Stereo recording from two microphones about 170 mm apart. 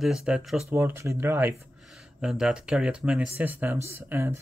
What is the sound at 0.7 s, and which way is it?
Speech, 15° right (ahead or behind).